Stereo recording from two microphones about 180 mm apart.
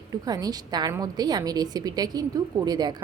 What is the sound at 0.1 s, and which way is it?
A woman's voice, 20° right (ahead or behind).